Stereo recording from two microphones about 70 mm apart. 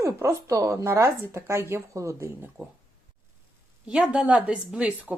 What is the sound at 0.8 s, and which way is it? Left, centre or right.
Speech, right.